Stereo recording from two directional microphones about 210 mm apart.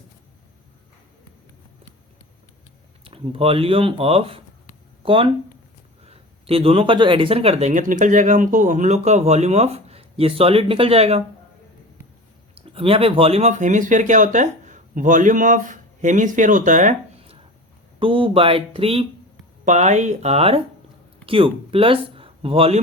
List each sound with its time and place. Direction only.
3.0 s speech: 25° right (ahead or behind)
12.5 s speech: 25° right (ahead or behind)